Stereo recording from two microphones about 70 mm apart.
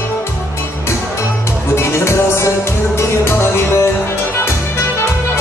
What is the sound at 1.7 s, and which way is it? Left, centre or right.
Music, left.